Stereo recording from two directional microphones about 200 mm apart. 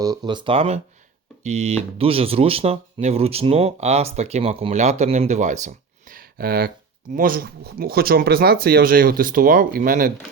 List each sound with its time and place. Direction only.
0.0 s speech: 20° right (ahead or behind); by 10.1 s 45° right (ahead or behind)